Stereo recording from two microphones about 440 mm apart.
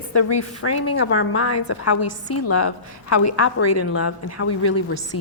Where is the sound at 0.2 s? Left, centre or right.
Left.